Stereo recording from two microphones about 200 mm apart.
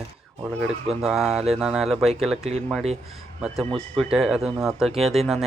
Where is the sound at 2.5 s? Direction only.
30° right (ahead or behind).